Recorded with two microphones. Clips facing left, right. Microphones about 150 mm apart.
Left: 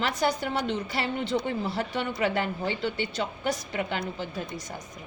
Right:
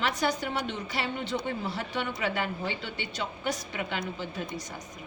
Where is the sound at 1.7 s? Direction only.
45° left (ahead or behind).